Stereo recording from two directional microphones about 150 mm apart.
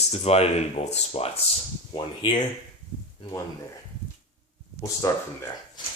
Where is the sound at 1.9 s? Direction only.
30° left (ahead or behind).